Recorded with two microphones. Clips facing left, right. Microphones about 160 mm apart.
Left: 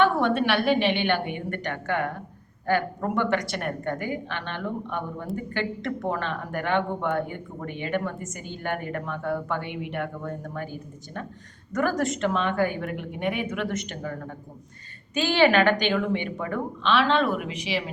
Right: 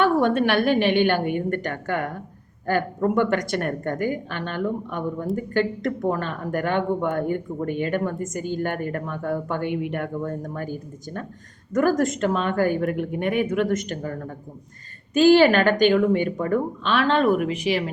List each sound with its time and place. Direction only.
0.0 s speech: 45° right (ahead or behind)
15.1 s speech: 45° right (ahead or behind)